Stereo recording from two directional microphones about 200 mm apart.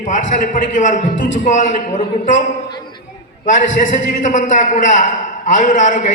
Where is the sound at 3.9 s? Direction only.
40° left (ahead or behind).